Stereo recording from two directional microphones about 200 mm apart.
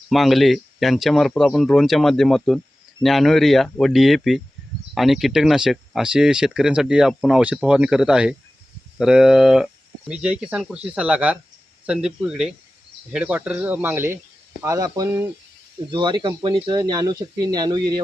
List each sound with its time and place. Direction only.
0.1 s speech: centre (ahead or behind); by 18.0 s 20° right (ahead or behind)